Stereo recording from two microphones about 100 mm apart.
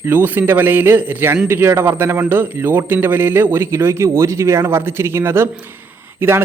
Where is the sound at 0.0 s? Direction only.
20° right (ahead or behind).